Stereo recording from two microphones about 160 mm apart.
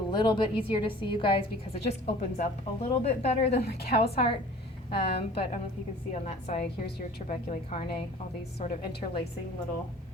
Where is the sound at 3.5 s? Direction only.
90° left.